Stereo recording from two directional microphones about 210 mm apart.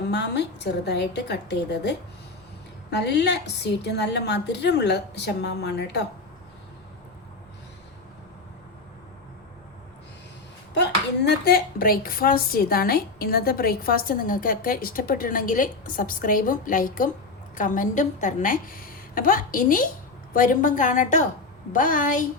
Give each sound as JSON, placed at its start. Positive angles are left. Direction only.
{"t": 0.1, "sound": "a woman's voice", "side_deg": 55}
{"t": 11.3, "sound": "a woman's voice", "side_deg": 45}